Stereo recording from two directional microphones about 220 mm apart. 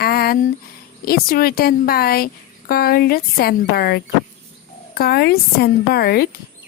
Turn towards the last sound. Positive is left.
turn(degrees=45)  # may be behind; listen again after turning